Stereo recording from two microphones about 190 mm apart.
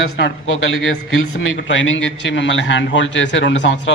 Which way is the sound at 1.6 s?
80° left.